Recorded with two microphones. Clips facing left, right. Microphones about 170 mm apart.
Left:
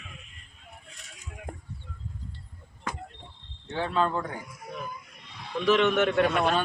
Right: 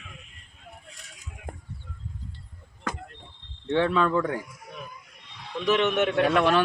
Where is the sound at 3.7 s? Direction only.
90° right.